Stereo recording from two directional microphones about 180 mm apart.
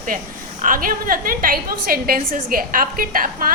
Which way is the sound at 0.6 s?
50° right (ahead or behind).